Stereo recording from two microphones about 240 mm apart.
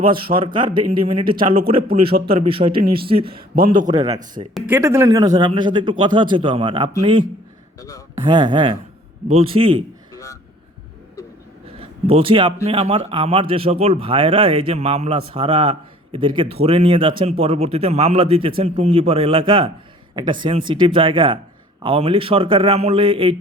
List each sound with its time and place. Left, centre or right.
0.0 s a man's voice: right
7.8 s speech: centre
8.3 s speech: centre
10.1 s a sound: centre
11.8 s speech: right